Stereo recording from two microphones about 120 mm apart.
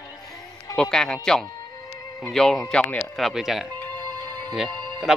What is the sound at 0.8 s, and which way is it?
Speech, 5° left (ahead or behind).